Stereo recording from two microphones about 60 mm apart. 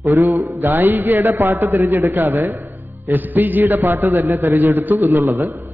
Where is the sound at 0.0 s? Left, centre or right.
Right.